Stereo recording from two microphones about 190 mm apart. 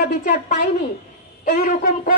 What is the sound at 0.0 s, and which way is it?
A woman's voice, 45° left (ahead or behind).